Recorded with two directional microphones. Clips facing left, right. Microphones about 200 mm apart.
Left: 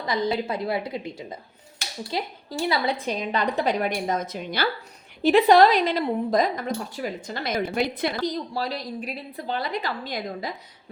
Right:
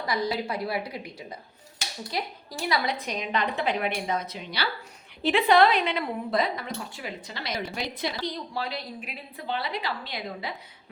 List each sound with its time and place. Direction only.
0.0 s a woman's voice: 25° left (ahead or behind); by 10.5 s 45° left (ahead or behind)